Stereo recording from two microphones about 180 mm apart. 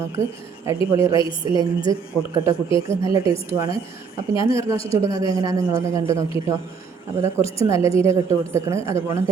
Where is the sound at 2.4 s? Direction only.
15° right (ahead or behind).